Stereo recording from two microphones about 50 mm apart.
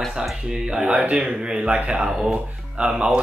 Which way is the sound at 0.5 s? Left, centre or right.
Centre.